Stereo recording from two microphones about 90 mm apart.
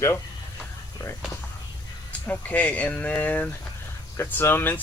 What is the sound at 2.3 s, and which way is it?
Speech, 15° left (ahead or behind).